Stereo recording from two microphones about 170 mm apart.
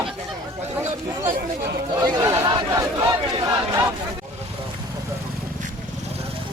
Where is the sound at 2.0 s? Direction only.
20° right (ahead or behind).